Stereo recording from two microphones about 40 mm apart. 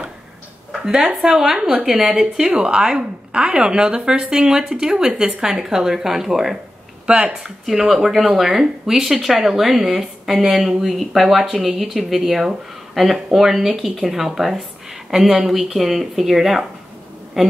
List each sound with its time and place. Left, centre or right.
0.7 s a woman's voice: centre
7.1 s a woman's voice: right
7.6 s a woman's voice: centre
15.3 s speech: centre